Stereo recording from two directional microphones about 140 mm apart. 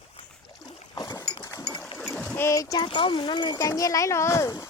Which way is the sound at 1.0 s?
25° left (ahead or behind).